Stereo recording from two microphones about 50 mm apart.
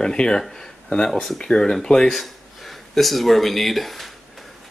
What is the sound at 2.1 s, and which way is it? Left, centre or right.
Speech, centre.